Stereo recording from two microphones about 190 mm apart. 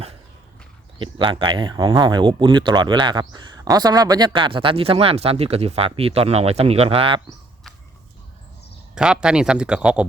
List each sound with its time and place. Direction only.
0.9 s speech: 25° right (ahead or behind)
9.0 s speech: 5° right (ahead or behind)